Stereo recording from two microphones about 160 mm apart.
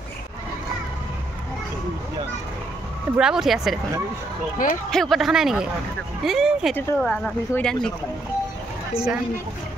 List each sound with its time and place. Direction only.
3.2 s speech: 5° right (ahead or behind)
4.6 s speech: 60° left (ahead or behind)
4.9 s speech: centre (ahead or behind)
8.9 s speech: 5° right (ahead or behind)